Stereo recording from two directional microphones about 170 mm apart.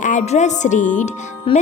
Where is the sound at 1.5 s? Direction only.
30° left (ahead or behind).